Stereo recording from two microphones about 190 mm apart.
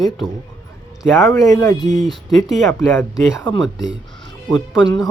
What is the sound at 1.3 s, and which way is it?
Speech, 20° left (ahead or behind).